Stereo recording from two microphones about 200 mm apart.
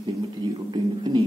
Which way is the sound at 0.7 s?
20° right (ahead or behind).